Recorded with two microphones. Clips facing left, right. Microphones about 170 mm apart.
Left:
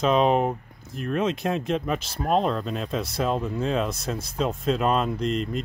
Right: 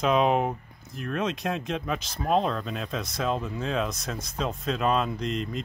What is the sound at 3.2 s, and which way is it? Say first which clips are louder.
Speech: left 3 dB; 5° left (ahead or behind).